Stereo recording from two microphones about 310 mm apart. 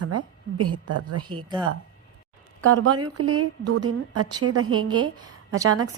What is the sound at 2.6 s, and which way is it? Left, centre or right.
A woman's voice, right.